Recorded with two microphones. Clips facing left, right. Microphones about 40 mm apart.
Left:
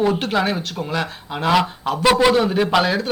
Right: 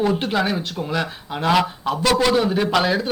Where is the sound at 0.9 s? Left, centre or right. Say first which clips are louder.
Even; centre.